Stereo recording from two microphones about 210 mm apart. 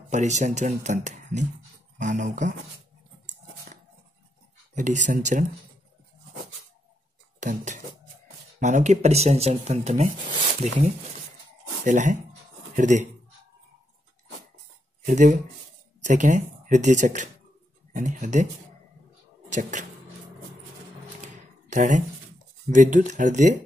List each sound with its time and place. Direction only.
0.1 s speech: 35° right (ahead or behind)
4.7 s speech: 35° right (ahead or behind)
7.3 s dishes: 35° right (ahead or behind)
8.5 s speech: 35° right (ahead or behind)
11.8 s speech: 35° right (ahead or behind)
15.0 s speech: 40° right (ahead or behind)
19.5 s speech: 35° right (ahead or behind)
21.6 s speech: 35° right (ahead or behind)